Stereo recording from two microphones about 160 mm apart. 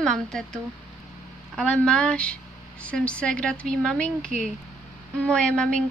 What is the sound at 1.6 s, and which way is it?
A woman's voice, 5° left (ahead or behind).